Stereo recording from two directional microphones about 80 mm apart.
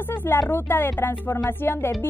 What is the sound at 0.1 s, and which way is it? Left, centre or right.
Speech, left.